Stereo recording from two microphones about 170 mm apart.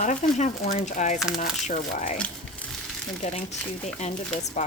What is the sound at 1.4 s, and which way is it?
Speech, 50° left (ahead or behind).